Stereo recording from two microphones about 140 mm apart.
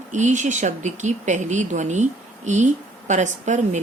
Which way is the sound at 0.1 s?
60° right (ahead or behind).